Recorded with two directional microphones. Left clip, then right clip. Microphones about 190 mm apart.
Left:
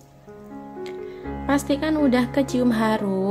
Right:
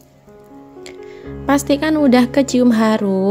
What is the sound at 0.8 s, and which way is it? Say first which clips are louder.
A woman's voice: even; 35° right (ahead or behind).